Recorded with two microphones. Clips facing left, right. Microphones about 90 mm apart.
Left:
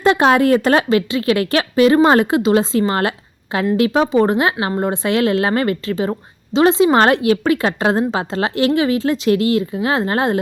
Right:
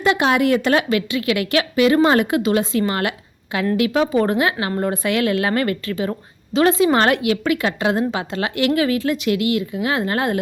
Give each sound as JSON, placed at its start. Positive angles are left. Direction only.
{"t": 0.0, "sound": "a woman's voice", "side_deg": 35}